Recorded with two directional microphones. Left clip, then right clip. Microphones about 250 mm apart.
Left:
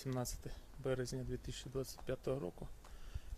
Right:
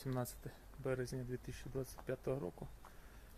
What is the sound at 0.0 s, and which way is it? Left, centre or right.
Speech, centre.